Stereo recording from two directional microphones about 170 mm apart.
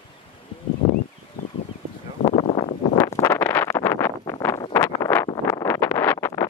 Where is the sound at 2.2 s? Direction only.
35° left (ahead or behind).